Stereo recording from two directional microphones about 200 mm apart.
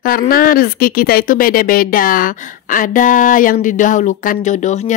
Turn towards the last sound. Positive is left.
turn(degrees=35)  # may be behind; listen again after turning